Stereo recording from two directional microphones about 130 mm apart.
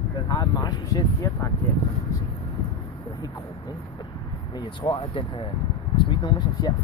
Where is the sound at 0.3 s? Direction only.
30° left (ahead or behind).